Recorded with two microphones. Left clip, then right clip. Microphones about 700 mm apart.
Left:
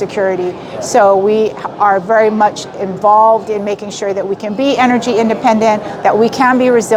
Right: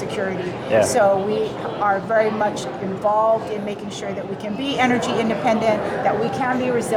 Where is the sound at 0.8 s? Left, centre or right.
Left.